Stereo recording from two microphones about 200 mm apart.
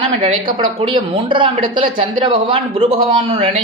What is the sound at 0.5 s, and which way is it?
A woman's voice, 25° right (ahead or behind).